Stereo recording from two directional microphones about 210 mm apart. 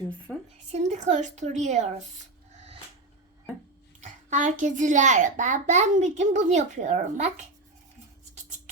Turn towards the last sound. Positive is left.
turn(degrees=-35)  # may be behind; listen again after turning